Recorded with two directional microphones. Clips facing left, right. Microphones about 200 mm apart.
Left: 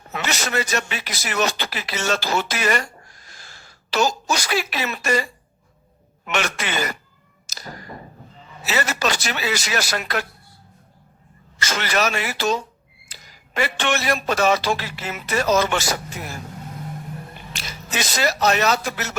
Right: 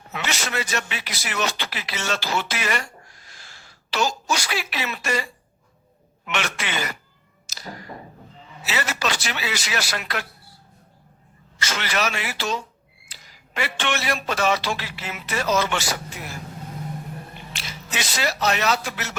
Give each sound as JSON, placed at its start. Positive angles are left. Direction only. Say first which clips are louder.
{"t": 0.1, "sound": "a man's voice", "louder": "left 3 dB", "side_deg": 40}
{"t": 7.5, "sound": "a sound", "louder": "even", "side_deg": 45}
{"t": 8.6, "sound": "a man's voice", "louder": "left 3 dB", "side_deg": 45}
{"t": 11.6, "sound": "a man's voice", "louder": "left 3 dB", "side_deg": 45}
{"t": 17.5, "sound": "speech", "louder": "left 3 dB", "side_deg": 45}